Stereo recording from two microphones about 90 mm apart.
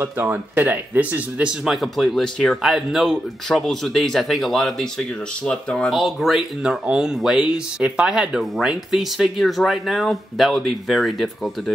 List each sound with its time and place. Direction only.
0.0 s speech: 25° right (ahead or behind)
1.6 s speech: centre (ahead or behind)